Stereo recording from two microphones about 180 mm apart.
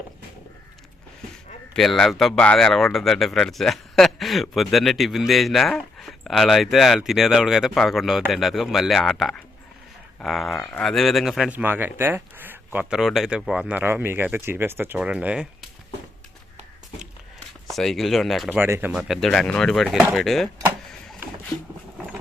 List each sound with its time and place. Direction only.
1.7 s speech: centre (ahead or behind)
17.7 s speech: centre (ahead or behind)
18.6 s speech: 10° right (ahead or behind)